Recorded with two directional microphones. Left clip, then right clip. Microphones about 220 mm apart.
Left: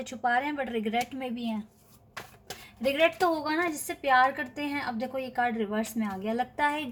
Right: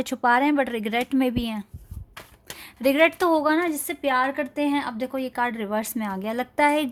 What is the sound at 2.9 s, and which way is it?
A woman's voice, 50° right (ahead or behind).